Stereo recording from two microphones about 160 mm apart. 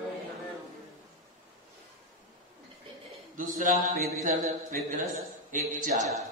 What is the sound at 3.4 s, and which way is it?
A man's voice, 55° right (ahead or behind).